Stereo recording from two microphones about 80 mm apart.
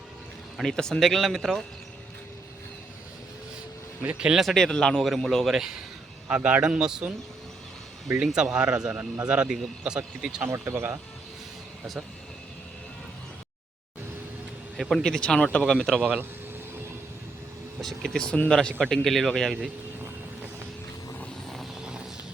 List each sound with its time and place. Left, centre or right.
0.5 s speech: centre
4.2 s speech: centre
4.4 s speech: centre
6.2 s speech: centre
8.2 s speech: centre
10.5 s speech: right
14.8 s speech: centre
15.0 s speech: centre
16.0 s speech: centre
17.7 s speech: centre
21.5 s vehicle: centre